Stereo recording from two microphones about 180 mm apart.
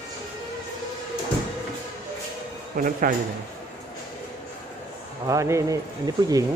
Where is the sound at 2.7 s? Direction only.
50° right (ahead or behind).